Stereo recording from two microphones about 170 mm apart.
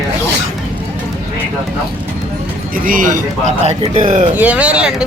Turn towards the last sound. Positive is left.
turn(degrees=-5)  # may be behind; listen again after turning